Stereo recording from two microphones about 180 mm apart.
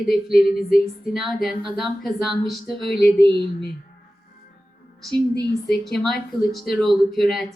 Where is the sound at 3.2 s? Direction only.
25° right (ahead or behind).